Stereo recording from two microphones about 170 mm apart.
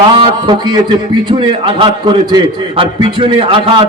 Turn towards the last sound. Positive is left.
turn(degrees=-30)  # may be behind; listen again after turning